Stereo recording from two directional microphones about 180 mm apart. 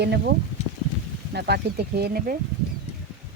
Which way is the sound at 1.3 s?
65° right (ahead or behind).